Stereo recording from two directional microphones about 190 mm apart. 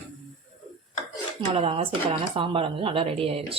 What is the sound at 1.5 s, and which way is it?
Speech, 30° right (ahead or behind).